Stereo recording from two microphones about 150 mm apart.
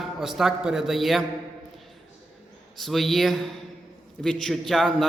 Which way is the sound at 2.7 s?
Centre (ahead or behind).